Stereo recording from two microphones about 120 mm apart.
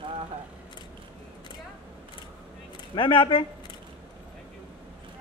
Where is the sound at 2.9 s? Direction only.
45° left (ahead or behind).